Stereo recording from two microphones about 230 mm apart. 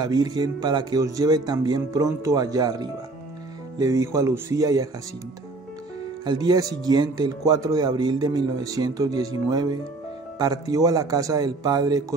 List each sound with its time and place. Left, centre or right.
0.0 s speech: centre
6.2 s speech: centre